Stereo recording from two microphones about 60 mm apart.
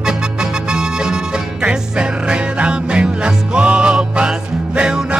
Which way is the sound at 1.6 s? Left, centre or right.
Centre.